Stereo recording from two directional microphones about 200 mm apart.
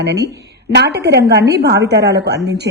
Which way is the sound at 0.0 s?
55° right (ahead or behind).